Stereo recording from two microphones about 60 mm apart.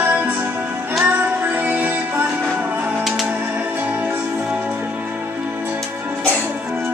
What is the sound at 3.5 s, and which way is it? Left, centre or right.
Music, right.